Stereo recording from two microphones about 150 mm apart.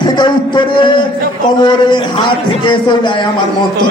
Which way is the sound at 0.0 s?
30° left (ahead or behind).